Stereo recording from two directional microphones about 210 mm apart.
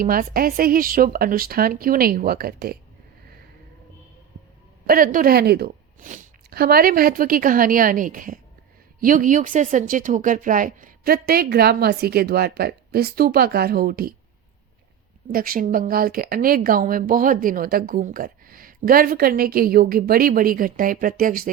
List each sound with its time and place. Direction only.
0.0 s speech: 40° right (ahead or behind)
4.9 s speech: 40° right (ahead or behind)
15.3 s speech: 45° right (ahead or behind)